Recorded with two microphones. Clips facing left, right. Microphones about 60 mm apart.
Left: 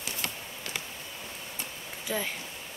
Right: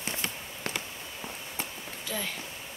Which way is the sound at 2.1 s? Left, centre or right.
Centre.